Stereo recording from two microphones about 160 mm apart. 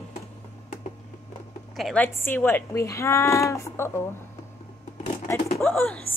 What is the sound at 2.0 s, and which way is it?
A woman's voice, 15° left (ahead or behind).